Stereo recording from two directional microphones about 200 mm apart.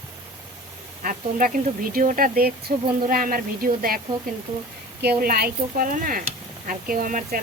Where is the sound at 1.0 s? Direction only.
45° right (ahead or behind).